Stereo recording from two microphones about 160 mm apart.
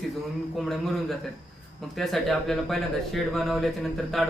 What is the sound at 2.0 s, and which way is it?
Speech, centre (ahead or behind).